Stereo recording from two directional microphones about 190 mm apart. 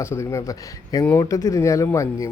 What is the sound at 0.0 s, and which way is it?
Speech, 15° left (ahead or behind).